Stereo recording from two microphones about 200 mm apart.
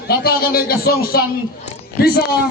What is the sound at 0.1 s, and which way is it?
A man's voice, 50° left (ahead or behind).